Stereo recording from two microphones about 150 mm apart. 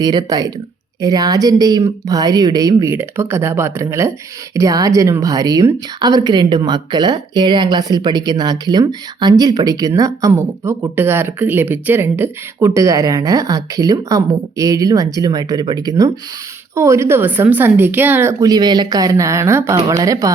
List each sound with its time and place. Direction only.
0.0 s speech: 25° right (ahead or behind)